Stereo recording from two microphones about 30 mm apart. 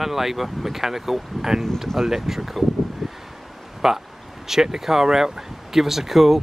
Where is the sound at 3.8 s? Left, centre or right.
Centre.